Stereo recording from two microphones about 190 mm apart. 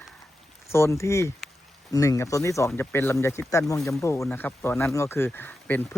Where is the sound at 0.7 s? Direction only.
15° left (ahead or behind).